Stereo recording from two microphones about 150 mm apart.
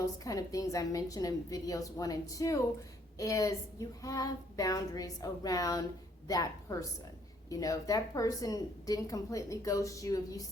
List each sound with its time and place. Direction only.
0.0 s a woman's voice: 25° left (ahead or behind)